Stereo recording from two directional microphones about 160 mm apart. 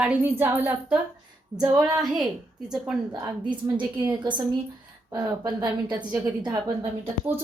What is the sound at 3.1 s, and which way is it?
Speech, 30° right (ahead or behind).